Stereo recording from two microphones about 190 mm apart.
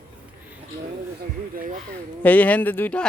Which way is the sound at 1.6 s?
45° right (ahead or behind).